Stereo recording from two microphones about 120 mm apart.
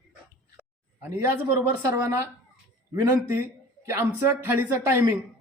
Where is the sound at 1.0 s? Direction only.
20° right (ahead or behind).